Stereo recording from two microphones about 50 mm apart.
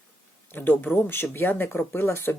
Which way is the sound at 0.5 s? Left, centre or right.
Left.